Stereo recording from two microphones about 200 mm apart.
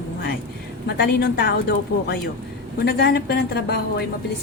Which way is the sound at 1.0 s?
55° left (ahead or behind).